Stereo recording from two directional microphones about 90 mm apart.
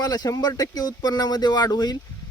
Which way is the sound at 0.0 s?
45° left (ahead or behind).